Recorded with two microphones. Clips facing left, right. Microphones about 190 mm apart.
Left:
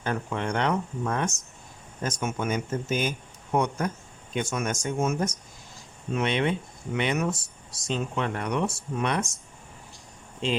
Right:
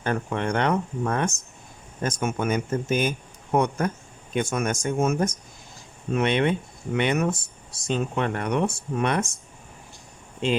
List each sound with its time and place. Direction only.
0.0 s speech: 55° right (ahead or behind)